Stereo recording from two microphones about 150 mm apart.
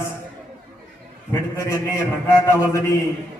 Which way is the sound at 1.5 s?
20° left (ahead or behind).